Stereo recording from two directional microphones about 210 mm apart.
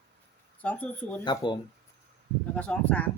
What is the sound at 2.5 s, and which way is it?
Speech, 5° left (ahead or behind).